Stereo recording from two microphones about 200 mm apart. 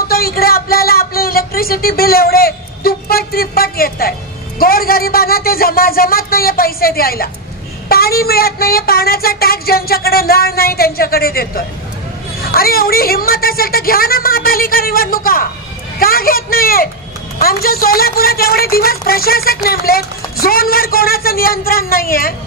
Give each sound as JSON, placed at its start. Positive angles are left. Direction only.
{"t": 0.1, "sound": "speech", "side_deg": 50}